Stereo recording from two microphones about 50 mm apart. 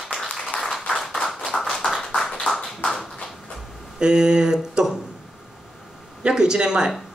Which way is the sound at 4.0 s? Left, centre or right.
Centre.